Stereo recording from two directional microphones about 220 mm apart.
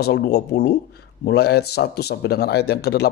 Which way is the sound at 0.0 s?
45° left (ahead or behind).